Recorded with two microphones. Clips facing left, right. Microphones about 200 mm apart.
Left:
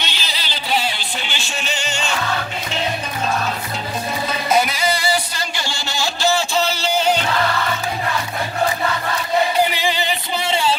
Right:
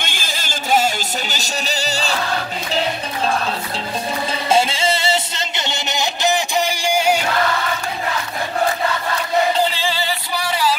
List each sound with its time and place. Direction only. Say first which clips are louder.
0.0 s music: right 1 dB; 50° right (ahead or behind)
4.3 s music: right 1 dB; 25° right (ahead or behind); by 7.2 s 10° right (ahead or behind)
9.6 s music: left 1 dB; 15° left (ahead or behind)